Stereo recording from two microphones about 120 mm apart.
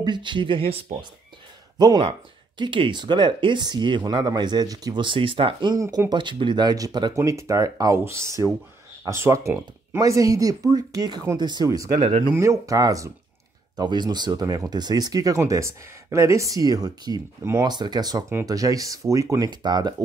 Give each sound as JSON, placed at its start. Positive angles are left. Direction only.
{"t": 0.0, "sound": "speech", "side_deg": -40}
{"t": 1.8, "sound": "speech", "side_deg": -40}
{"t": 5.8, "sound": "speech", "side_deg": -30}
{"t": 12.0, "sound": "speech", "side_deg": -75}
{"t": 12.4, "sound": "speech", "side_deg": -25}
{"t": 17.4, "sound": "speech", "side_deg": -25}
{"t": 17.6, "sound": "speech", "side_deg": -35}